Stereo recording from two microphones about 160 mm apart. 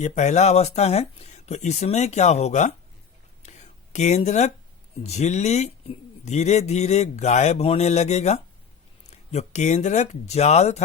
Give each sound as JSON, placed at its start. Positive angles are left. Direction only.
{"t": 0.0, "sound": "speech", "side_deg": 45}
{"t": 3.4, "sound": "a sound", "side_deg": 45}
{"t": 3.9, "sound": "speech", "side_deg": 45}